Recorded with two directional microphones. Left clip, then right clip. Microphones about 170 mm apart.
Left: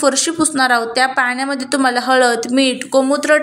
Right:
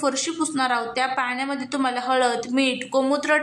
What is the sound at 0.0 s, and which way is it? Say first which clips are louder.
A woman's voice: left 9 dB; 25° left (ahead or behind).